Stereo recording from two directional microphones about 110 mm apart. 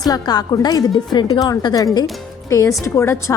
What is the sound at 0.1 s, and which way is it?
A woman's voice, 35° left (ahead or behind).